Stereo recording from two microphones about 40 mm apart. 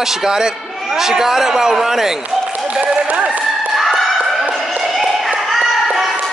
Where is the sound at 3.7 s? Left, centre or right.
Centre.